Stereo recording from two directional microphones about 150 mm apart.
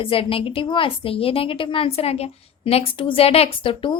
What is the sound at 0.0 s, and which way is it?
A woman's voice, 40° left (ahead or behind).